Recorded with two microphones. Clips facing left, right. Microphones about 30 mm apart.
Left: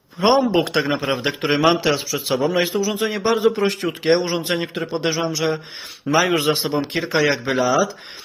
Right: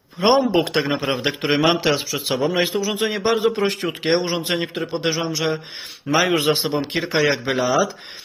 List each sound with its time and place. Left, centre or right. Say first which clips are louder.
0.2 s speech: even; centre
2.7 s a man's voice: left 1 dB; right
4.0 s speech: left 2 dB; centre